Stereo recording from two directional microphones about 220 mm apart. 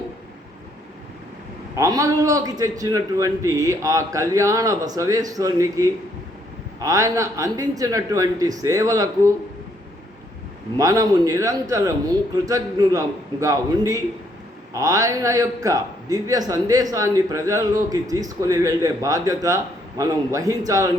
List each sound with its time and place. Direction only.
1.7 s a man's voice: 15° right (ahead or behind)
10.8 s a man's voice: 15° right (ahead or behind)